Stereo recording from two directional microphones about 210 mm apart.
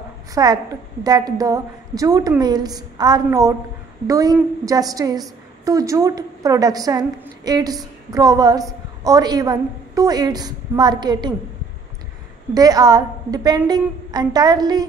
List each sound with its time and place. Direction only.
0.3 s a woman's voice: 20° right (ahead or behind)
12.5 s a woman's voice: 20° right (ahead or behind)